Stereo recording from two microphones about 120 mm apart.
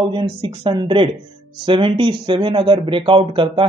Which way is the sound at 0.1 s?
45° right (ahead or behind).